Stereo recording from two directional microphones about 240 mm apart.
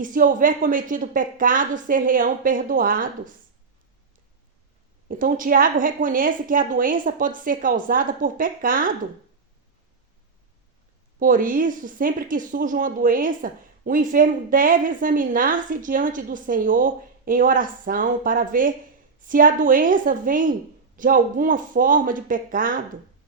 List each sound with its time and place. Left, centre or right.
0.0 s a woman's voice: right
5.0 s a woman's voice: right
11.2 s a woman's voice: right